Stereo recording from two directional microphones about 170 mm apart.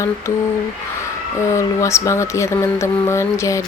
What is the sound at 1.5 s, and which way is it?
Speech, 15° left (ahead or behind).